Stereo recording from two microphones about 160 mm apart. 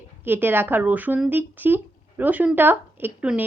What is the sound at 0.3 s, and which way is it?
Speech, 15° right (ahead or behind).